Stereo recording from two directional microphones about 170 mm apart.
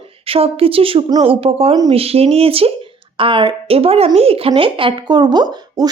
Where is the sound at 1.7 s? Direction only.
25° right (ahead or behind).